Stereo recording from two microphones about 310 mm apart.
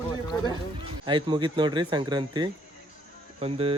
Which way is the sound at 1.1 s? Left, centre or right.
Centre.